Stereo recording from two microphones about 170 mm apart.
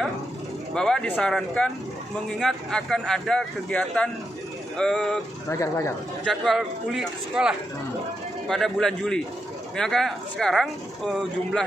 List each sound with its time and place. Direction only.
0.7 s speech: 5° left (ahead or behind)
5.5 s speech: 15° left (ahead or behind)
6.2 s speech: centre (ahead or behind)